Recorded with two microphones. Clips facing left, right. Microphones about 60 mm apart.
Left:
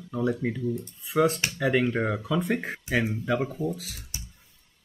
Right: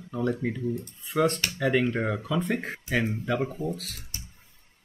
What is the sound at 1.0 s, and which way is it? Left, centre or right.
Speech, centre.